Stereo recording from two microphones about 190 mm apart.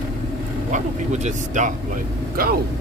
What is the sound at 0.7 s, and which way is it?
Speech, 40° right (ahead or behind).